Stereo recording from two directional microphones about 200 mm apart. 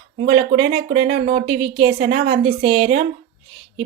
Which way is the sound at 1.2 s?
30° right (ahead or behind).